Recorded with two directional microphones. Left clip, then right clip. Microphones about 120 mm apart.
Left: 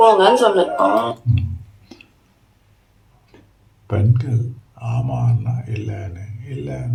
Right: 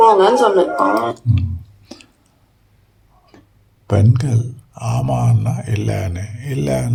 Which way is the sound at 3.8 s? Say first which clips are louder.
Right 5 dB; 55° right (ahead or behind).